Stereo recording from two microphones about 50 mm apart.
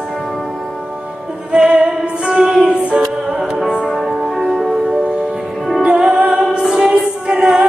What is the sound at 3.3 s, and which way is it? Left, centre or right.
Music, centre.